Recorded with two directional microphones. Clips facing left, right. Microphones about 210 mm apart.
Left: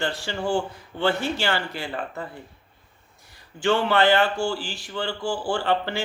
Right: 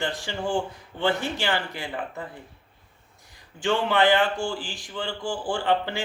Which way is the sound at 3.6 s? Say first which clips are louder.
Left 2 dB; 15° right (ahead or behind).